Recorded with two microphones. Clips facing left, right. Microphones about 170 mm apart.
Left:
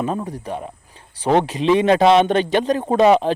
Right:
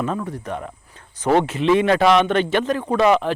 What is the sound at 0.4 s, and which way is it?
Speech, 30° left (ahead or behind).